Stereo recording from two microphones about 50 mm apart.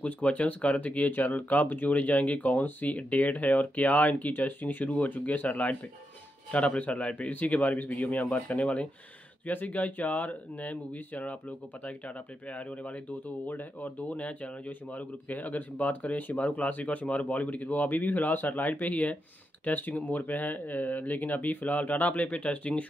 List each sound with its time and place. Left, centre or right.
0.0 s speech: left
12.4 s speech: left